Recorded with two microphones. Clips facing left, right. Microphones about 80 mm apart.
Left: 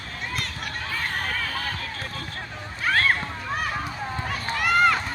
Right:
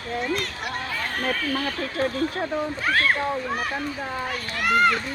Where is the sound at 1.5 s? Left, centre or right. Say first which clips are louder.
Right 5 dB; right.